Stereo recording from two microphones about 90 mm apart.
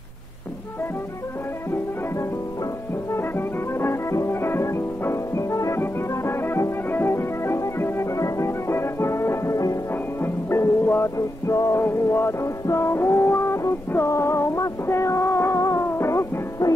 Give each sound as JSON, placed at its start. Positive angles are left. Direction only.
{"t": 3.1, "sound": "music", "side_deg": 25}